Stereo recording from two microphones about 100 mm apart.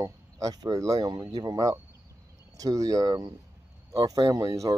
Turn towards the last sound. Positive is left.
turn(degrees=-35)  # may be behind; listen again after turning